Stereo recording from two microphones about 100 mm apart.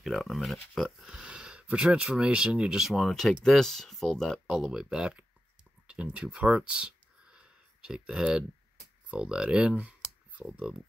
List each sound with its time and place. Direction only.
0.0 s speech: centre (ahead or behind); by 10.4 s 15° right (ahead or behind)